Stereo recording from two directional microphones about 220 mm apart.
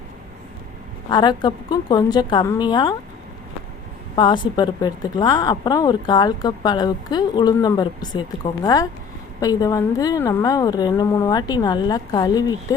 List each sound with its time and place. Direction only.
1.1 s speech: 20° left (ahead or behind)
4.1 s a woman's voice: 20° left (ahead or behind)